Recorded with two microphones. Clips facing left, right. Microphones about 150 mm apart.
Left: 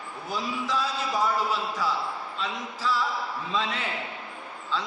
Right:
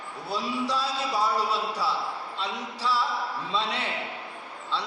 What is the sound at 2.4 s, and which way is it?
A man's voice, 35° right (ahead or behind).